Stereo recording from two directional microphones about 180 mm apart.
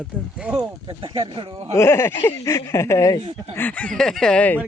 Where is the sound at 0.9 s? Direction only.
25° right (ahead or behind).